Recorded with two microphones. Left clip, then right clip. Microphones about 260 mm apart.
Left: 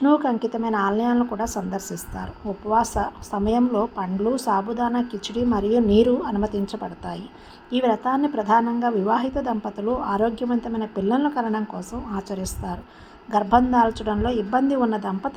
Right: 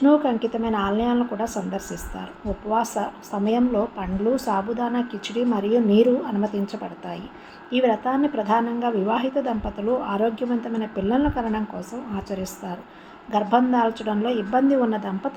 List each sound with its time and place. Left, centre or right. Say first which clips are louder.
0.0 s a woman's voice: right 1 dB; left